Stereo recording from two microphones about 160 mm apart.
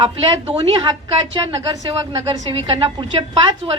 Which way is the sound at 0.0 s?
35° right (ahead or behind).